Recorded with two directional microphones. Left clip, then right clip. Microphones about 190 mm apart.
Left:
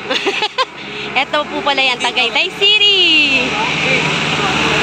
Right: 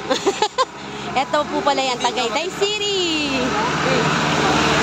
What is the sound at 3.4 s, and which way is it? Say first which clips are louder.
Vehicle: left 4 dB; 50° right (ahead or behind).